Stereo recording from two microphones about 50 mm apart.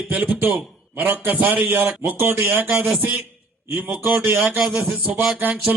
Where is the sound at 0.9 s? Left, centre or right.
Right.